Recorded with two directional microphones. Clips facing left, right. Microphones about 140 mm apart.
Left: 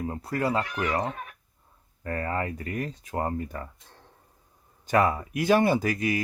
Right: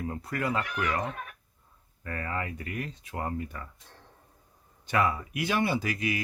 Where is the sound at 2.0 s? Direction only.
35° left (ahead or behind).